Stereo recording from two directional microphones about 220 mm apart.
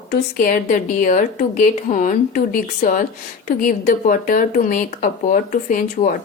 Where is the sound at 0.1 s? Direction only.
40° left (ahead or behind).